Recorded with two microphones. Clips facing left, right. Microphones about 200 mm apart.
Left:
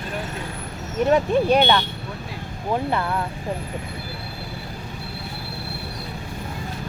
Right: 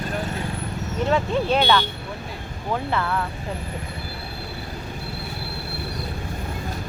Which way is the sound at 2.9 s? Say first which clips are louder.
Even; 20° left (ahead or behind).